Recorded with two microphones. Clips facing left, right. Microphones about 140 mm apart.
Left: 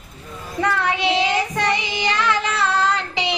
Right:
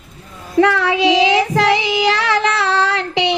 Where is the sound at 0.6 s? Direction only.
90° right; by 3.3 s 70° right (ahead or behind).